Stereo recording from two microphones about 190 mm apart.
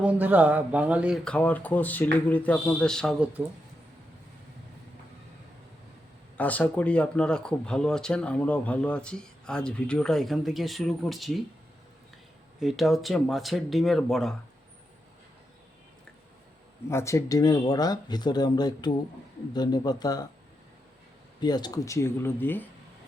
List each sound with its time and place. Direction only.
0.0 s speech: 10° right (ahead or behind)
6.3 s speech: 10° left (ahead or behind)
12.5 s speech: centre (ahead or behind)
16.9 s speech: 15° left (ahead or behind)
21.4 s speech: 20° left (ahead or behind)